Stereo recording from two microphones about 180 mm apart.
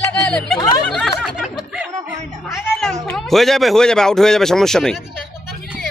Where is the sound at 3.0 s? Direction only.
5° left (ahead or behind).